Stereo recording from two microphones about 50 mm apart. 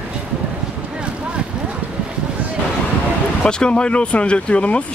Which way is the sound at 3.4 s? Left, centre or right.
Centre.